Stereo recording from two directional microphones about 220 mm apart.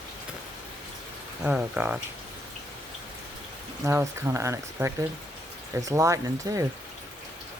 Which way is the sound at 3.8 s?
15° right (ahead or behind).